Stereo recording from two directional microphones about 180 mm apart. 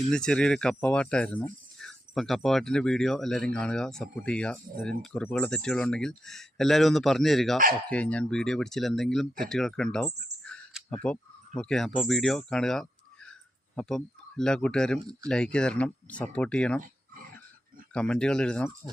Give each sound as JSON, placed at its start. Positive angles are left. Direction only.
{"t": 0.1, "sound": "speech", "side_deg": 5}
{"t": 10.4, "sound": "a sound", "side_deg": 5}
{"t": 13.7, "sound": "speech", "side_deg": 5}
{"t": 17.9, "sound": "speech", "side_deg": 5}